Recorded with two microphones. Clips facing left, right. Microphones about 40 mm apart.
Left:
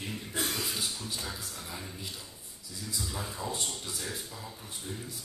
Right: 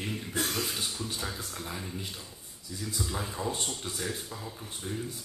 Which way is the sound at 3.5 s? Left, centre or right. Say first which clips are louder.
Right 2 dB; right.